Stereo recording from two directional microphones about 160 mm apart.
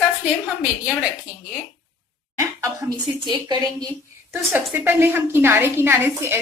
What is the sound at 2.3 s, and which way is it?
A woman's voice, 20° right (ahead or behind).